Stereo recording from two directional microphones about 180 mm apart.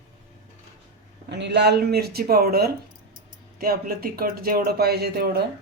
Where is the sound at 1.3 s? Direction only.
70° right (ahead or behind).